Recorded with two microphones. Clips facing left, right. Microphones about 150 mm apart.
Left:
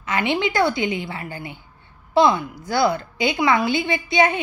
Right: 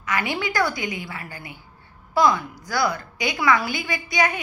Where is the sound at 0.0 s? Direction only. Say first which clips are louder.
Left 4 dB; 25° left (ahead or behind).